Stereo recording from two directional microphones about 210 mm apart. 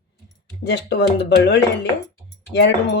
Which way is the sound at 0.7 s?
55° left (ahead or behind).